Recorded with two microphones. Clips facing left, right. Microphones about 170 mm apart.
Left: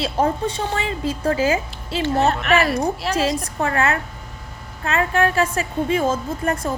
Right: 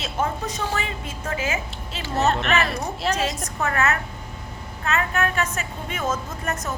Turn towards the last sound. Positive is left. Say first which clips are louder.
# left 6 dB
turn(degrees=30)  # may be behind; listen again after turning